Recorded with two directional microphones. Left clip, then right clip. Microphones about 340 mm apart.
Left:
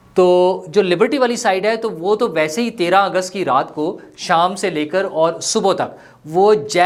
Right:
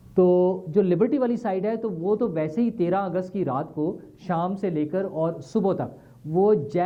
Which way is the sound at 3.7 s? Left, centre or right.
Centre.